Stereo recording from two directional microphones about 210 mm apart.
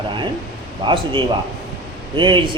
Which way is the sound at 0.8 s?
25° right (ahead or behind).